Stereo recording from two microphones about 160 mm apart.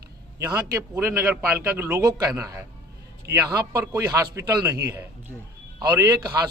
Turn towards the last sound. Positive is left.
turn(degrees=-20)  # may be behind; listen again after turning